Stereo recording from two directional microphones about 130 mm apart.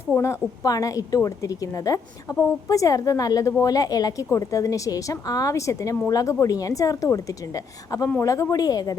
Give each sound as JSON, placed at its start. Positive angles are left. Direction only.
{"t": 0.2, "sound": "a woman's voice", "side_deg": 25}